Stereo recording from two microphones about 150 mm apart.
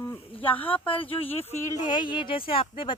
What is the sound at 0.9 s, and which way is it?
Speech, 35° left (ahead or behind).